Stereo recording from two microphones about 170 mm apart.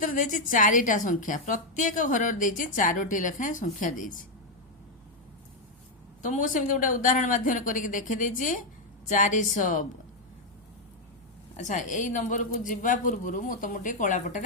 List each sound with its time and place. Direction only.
0.0 s a woman's voice: 50° left (ahead or behind)
6.2 s a woman's voice: 50° left (ahead or behind)
11.6 s a woman's voice: 45° left (ahead or behind)